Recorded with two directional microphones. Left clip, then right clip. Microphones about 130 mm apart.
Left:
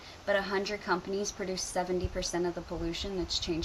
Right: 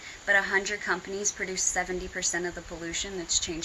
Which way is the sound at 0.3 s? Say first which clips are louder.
Right 5 dB; 20° left (ahead or behind).